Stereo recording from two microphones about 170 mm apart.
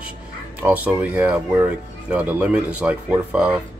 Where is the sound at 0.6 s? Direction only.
10° right (ahead or behind).